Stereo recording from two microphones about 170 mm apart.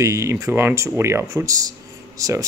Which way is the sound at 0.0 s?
15° right (ahead or behind).